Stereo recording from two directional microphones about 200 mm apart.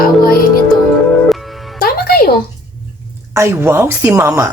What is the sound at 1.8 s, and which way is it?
Music, 50° left (ahead or behind).